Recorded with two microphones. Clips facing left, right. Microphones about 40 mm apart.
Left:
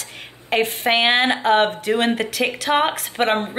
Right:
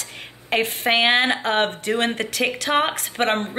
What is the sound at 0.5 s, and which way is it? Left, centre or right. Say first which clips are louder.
Speech: left 2 dB; centre.